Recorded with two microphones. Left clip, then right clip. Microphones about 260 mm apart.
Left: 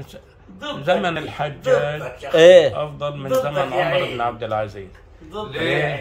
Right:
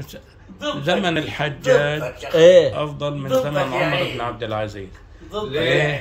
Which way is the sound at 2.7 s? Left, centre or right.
Centre.